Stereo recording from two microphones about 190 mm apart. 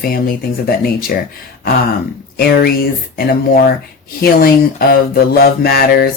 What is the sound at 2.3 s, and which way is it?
Speech, 55° left (ahead or behind).